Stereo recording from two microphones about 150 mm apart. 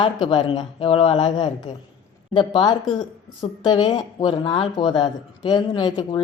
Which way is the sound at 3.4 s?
30° left (ahead or behind).